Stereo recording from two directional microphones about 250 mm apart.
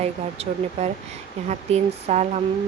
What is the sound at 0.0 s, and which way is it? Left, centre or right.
Speech, right.